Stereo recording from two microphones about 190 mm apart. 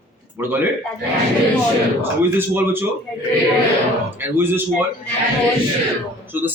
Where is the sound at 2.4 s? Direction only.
10° right (ahead or behind).